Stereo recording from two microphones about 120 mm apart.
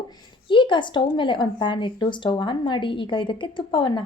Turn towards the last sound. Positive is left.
turn(degrees=45)  # may be behind; listen again after turning